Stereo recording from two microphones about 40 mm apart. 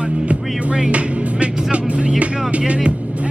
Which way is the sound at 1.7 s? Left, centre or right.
Right.